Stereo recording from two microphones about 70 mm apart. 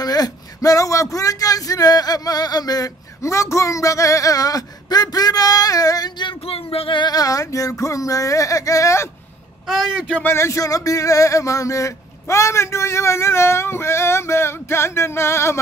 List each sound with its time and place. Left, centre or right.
0.0 s speech: left
3.2 s speech: left
7.0 s a sound: left
9.7 s a man's voice: centre
10.2 s speech: left